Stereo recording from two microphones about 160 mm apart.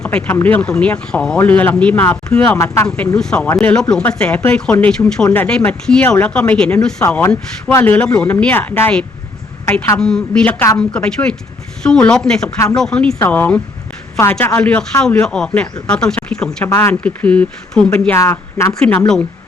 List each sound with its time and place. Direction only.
0.0 s speech: 5° left (ahead or behind)
10.0 s speech: 5° left (ahead or behind)